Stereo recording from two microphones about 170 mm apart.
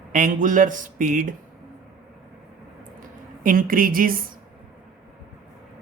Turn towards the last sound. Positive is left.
turn(degrees=-55)  # may be behind; listen again after turning